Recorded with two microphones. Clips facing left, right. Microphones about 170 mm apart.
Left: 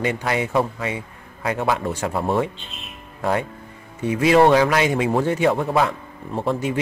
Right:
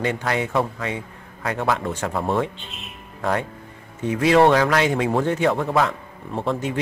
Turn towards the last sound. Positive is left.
turn(degrees=5)  # may be behind; listen again after turning